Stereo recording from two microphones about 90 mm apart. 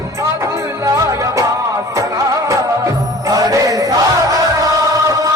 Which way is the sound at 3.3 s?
40° right (ahead or behind).